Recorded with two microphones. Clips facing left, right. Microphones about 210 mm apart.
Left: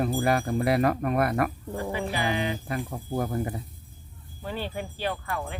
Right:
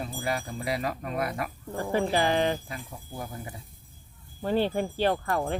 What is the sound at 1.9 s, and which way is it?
Speech, 45° right (ahead or behind).